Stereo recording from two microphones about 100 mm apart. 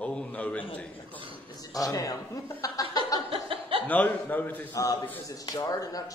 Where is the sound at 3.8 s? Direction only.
15° left (ahead or behind).